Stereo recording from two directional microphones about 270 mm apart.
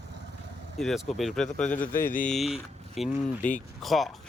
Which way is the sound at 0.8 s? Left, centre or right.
Centre.